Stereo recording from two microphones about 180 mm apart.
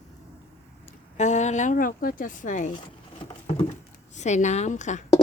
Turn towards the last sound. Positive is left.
turn(degrees=40)  # may be behind; listen again after turning